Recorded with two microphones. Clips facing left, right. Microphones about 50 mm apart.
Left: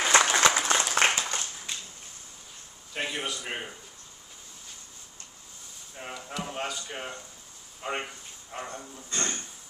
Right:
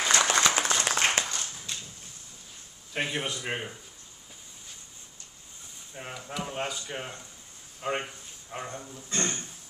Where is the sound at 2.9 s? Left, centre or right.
Centre.